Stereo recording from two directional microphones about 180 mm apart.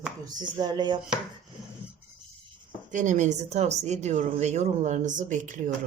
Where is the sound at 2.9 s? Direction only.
40° right (ahead or behind).